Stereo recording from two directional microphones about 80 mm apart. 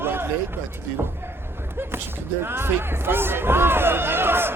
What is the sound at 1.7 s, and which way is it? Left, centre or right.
Speech, right.